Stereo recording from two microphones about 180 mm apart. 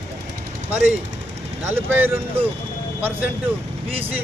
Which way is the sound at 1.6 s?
10° right (ahead or behind).